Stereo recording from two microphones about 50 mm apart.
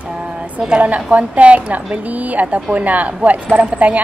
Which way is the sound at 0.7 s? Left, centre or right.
Right.